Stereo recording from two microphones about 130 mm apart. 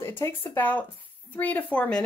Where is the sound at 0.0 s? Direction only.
20° left (ahead or behind).